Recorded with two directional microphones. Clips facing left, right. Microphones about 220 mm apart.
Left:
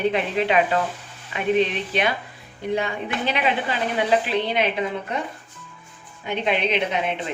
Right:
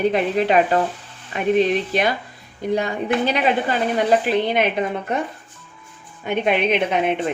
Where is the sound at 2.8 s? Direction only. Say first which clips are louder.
Right 5 dB; 40° right (ahead or behind).